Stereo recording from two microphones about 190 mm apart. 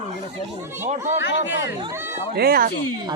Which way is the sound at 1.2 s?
70° left (ahead or behind).